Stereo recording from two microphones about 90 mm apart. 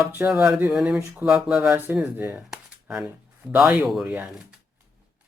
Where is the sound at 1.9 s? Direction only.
20° right (ahead or behind).